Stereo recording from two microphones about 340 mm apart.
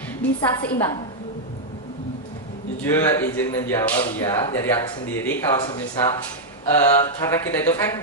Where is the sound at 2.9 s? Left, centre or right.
Centre.